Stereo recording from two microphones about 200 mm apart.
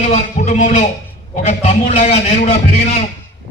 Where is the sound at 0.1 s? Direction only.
35° left (ahead or behind).